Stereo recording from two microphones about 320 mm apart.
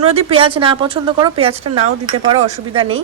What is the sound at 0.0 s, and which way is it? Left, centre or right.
Speech, centre.